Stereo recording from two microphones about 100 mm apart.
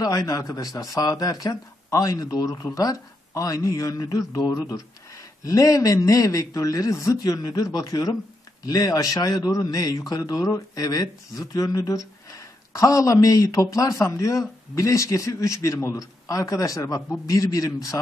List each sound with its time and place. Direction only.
0.0 s speech: 35° left (ahead or behind)